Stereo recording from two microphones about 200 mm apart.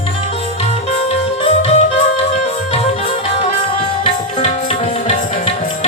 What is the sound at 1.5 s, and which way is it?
Music, 30° left (ahead or behind).